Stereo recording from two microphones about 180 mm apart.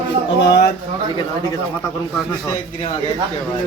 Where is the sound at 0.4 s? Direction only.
65° left (ahead or behind).